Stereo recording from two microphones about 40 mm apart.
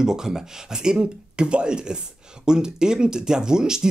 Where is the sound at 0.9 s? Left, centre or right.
Right.